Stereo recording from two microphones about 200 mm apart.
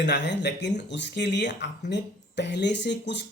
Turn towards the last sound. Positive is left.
turn(degrees=60)  # may be behind; listen again after turning